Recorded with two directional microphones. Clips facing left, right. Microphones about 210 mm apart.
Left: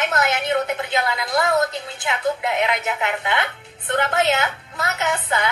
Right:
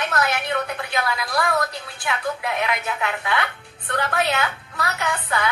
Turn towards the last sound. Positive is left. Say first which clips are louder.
# left 2 dB
turn(degrees=20)  # may be behind; listen again after turning